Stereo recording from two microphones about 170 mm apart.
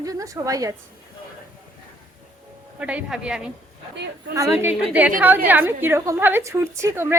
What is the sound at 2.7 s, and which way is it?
Speech, 5° right (ahead or behind).